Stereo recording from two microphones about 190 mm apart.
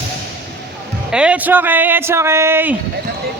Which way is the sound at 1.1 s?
5° right (ahead or behind).